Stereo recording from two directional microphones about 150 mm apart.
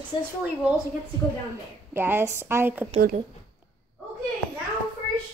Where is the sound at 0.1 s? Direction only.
30° left (ahead or behind).